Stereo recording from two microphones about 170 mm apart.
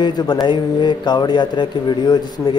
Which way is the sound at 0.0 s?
25° left (ahead or behind).